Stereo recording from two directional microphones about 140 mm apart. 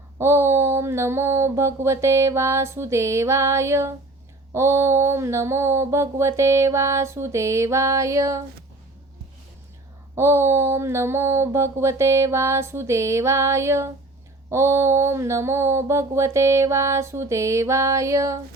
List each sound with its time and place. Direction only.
0.2 s mantra: 20° right (ahead or behind)
10.2 s mantra: 20° right (ahead or behind)